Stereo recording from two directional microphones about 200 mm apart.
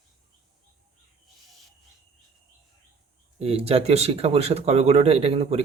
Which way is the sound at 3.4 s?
30° right (ahead or behind).